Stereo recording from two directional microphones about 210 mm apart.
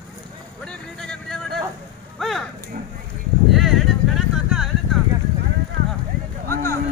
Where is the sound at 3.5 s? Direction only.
Centre (ahead or behind).